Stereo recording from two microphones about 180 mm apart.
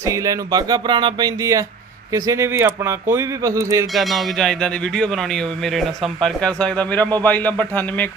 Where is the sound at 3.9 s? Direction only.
Centre (ahead or behind).